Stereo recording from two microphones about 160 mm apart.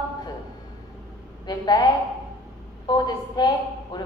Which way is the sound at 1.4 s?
25° left (ahead or behind).